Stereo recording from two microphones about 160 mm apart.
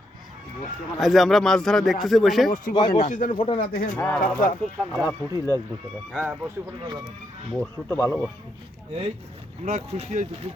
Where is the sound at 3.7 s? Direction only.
65° left (ahead or behind).